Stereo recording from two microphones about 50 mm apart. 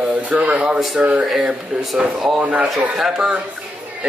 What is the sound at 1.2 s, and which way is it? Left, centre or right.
Speech, centre.